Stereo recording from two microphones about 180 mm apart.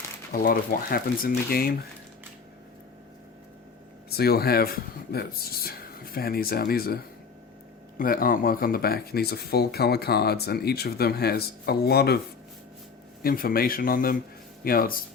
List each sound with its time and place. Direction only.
0.3 s speech: 55° left (ahead or behind)
4.1 s speech: 60° left (ahead or behind)
13.2 s speech: 55° left (ahead or behind)